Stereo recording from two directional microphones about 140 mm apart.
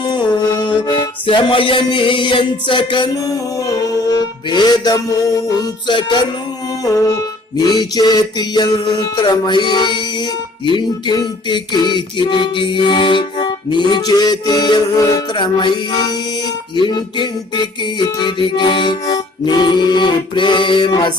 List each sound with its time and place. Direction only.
0.0 s music: 30° left (ahead or behind)
6.8 s music: 25° left (ahead or behind)